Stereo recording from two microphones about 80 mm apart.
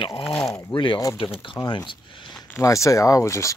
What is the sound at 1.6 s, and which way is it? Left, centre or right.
Speech, left.